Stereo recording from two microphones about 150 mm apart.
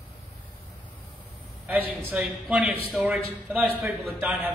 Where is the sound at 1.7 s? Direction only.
10° right (ahead or behind).